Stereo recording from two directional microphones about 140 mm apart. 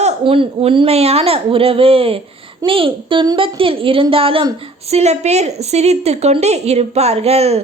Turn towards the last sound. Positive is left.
turn(degrees=-45)  # may be behind; listen again after turning